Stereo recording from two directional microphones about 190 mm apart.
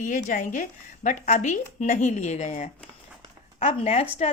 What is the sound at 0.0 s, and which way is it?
A woman's voice, 40° left (ahead or behind).